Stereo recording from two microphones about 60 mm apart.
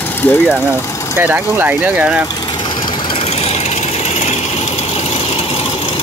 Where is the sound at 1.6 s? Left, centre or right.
Right.